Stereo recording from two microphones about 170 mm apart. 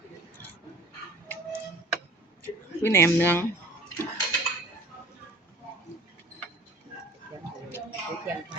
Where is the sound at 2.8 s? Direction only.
15° left (ahead or behind).